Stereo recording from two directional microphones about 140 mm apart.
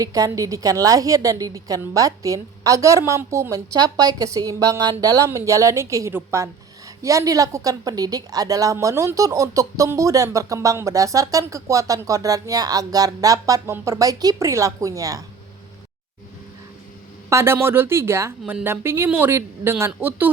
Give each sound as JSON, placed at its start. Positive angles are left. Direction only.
{"t": 0.0, "sound": "a woman's voice", "side_deg": -25}
{"t": 17.2, "sound": "speech", "side_deg": -20}